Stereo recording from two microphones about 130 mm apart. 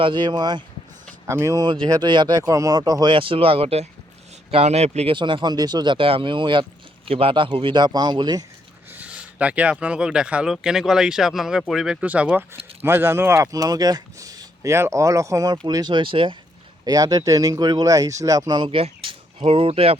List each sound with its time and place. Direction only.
0.0 s speech: 35° right (ahead or behind); by 5.1 s 55° right (ahead or behind)
5.1 s speech: 35° right (ahead or behind)
8.9 s speech: 10° right (ahead or behind); by 16.4 s 40° right (ahead or behind)
16.8 s speech: 30° right (ahead or behind); by 20.0 s 45° right (ahead or behind)